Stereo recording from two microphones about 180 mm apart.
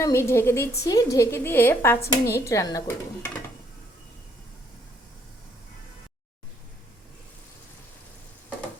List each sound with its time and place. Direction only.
0.0 s a woman's voice: 15° left (ahead or behind)